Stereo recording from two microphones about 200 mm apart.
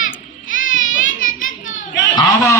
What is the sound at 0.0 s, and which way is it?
Baby cry, 80° left.